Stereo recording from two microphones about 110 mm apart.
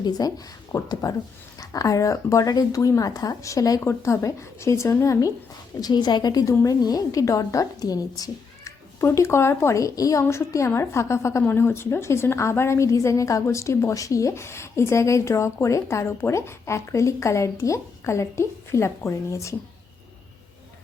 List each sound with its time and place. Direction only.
0.0 s speech: 35° left (ahead or behind)
5.8 s a woman's voice: 40° left (ahead or behind)